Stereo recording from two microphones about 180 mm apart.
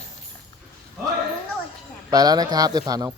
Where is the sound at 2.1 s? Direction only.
20° right (ahead or behind).